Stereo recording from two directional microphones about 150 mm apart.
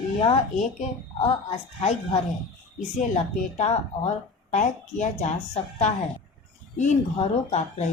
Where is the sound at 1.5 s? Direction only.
50° left (ahead or behind).